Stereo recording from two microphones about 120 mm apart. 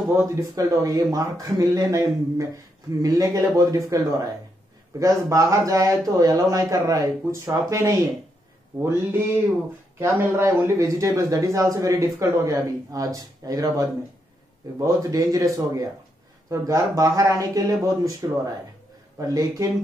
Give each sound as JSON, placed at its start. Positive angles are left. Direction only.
{"t": 0.1, "sound": "speech", "side_deg": -25}